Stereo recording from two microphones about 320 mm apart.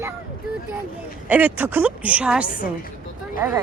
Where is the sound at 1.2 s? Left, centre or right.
Centre.